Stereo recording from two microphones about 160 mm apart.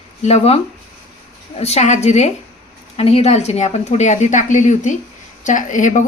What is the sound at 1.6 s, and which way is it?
Speech, 45° left (ahead or behind).